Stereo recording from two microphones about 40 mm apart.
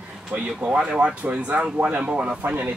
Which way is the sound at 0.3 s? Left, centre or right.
Right.